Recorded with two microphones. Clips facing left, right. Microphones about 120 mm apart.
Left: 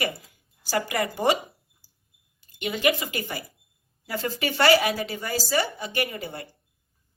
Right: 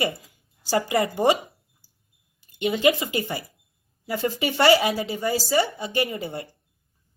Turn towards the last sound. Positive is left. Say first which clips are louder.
# right 3 dB
turn(degrees=-25)  # may be behind; listen again after turning